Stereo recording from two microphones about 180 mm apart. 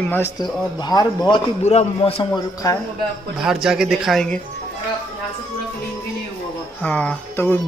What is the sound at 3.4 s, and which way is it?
Speech, 5° right (ahead or behind).